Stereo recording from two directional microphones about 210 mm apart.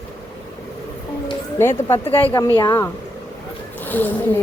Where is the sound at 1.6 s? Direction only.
10° left (ahead or behind).